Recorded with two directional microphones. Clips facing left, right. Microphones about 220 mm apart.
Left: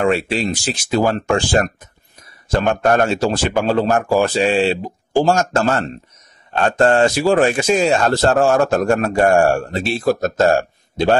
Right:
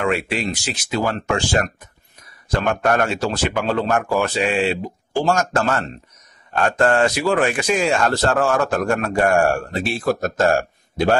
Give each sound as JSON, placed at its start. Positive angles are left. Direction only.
{"t": 0.0, "sound": "a man's voice", "side_deg": 30}